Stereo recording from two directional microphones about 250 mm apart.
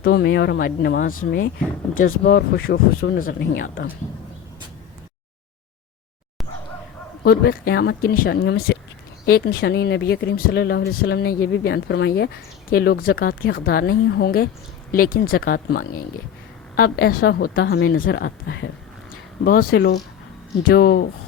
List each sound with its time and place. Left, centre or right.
0.0 s speech: left
7.3 s speech: left